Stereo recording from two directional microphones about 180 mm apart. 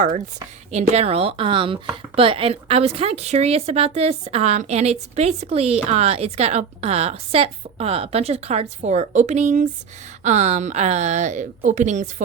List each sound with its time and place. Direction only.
0.7 s speech: 35° right (ahead or behind)